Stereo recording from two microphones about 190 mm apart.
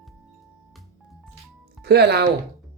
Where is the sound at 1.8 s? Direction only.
60° right (ahead or behind).